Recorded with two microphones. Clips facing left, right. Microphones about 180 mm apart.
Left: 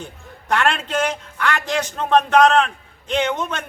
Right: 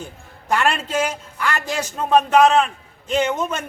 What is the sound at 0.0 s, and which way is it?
A man's voice, 5° right (ahead or behind).